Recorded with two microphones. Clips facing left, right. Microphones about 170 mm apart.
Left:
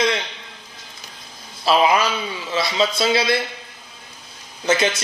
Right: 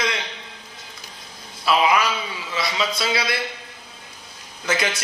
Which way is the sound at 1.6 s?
30° left (ahead or behind).